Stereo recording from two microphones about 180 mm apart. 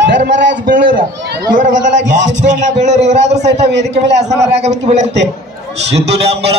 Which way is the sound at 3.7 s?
75° right (ahead or behind).